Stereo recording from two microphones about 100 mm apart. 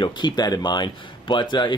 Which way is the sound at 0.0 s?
45° left (ahead or behind).